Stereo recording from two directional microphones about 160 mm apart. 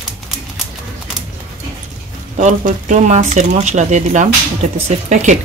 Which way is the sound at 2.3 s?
50° right (ahead or behind).